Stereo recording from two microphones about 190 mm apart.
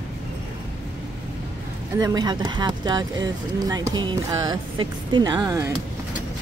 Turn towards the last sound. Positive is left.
turn(degrees=-15)  # may be behind; listen again after turning